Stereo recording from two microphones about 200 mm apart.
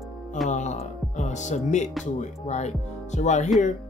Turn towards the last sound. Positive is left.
turn(degrees=35)  # may be behind; listen again after turning